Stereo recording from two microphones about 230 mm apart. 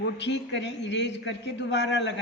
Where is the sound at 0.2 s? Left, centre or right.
Left.